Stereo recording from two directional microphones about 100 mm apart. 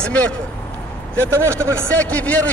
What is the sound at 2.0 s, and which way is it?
Speech, 15° left (ahead or behind).